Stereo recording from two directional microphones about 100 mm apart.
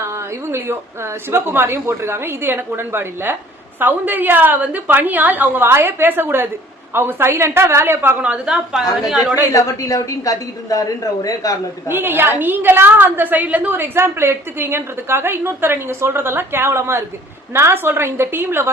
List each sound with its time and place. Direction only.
0.0 s a woman's voice: 25° right (ahead or behind); by 9.2 s centre (ahead or behind)
9.5 s a woman's voice: 35° left (ahead or behind)
11.9 s a woman's voice: 20° right (ahead or behind)